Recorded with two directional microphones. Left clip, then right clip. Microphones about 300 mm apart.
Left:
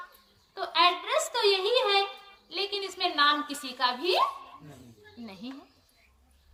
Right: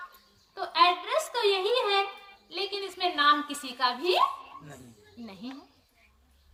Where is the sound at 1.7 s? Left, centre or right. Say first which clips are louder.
Left 1 dB; centre.